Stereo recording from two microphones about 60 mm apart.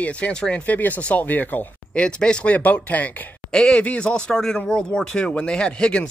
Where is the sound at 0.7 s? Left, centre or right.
Left.